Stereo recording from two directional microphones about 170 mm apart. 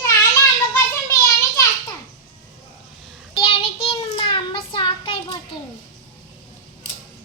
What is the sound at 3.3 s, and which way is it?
Child singing, 35° left (ahead or behind).